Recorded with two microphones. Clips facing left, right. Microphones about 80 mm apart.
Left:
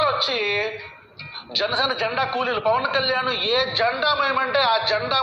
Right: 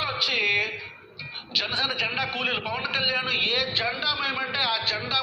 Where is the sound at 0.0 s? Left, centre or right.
Left.